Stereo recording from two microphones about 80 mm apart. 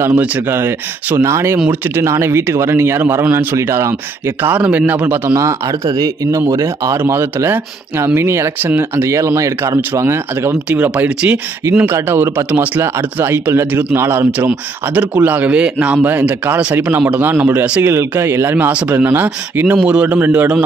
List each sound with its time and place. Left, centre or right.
0.0 s speech: right
4.4 s speech: right
5.3 s speech: right
7.0 s speech: right
10.7 s speech: centre
11.9 s speech: right
17.8 s speech: right
18.7 s speech: centre